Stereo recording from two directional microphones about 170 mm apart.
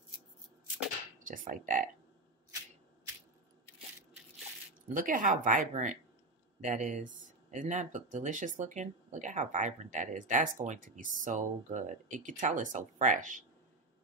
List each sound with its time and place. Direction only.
1.2 s speech: 50° right (ahead or behind)
4.8 s speech: 50° right (ahead or behind)